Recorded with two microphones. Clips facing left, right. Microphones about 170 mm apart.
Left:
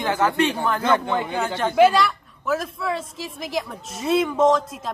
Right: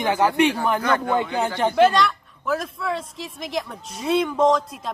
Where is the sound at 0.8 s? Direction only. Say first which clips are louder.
Left 1 dB; 25° left (ahead or behind).